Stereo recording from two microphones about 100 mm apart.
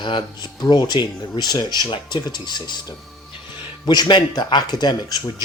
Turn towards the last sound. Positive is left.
turn(degrees=45)  # may be behind; listen again after turning